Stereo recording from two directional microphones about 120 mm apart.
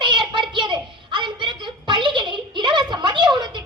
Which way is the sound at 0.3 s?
40° right (ahead or behind).